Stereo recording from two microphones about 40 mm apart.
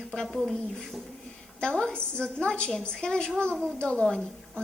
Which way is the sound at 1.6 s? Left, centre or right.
Centre.